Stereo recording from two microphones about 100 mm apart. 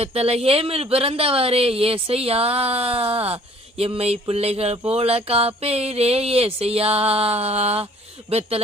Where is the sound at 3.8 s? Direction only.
85° right.